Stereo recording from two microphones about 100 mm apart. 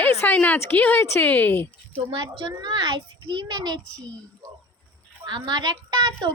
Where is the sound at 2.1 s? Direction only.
55° right (ahead or behind).